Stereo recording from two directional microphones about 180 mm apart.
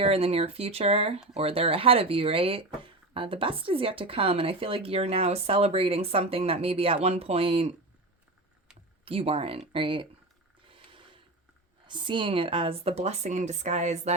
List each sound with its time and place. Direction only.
0.0 s speech: 35° right (ahead or behind)
9.0 s speech: 30° right (ahead or behind)
10.7 s a sound: 30° right (ahead or behind)
11.9 s speech: 25° right (ahead or behind)